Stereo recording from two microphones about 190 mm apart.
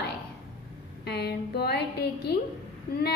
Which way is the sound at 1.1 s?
60° left (ahead or behind).